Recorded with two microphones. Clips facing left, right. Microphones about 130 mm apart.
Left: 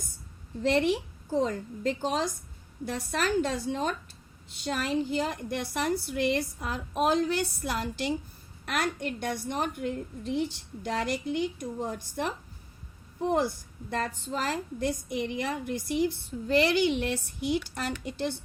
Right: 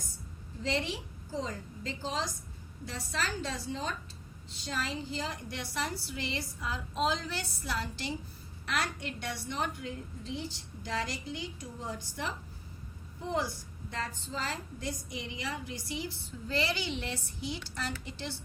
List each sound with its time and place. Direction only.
0.6 s a woman's voice: 60° left (ahead or behind)